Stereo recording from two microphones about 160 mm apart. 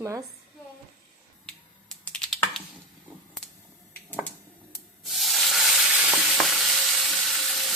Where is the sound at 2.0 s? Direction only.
5° left (ahead or behind).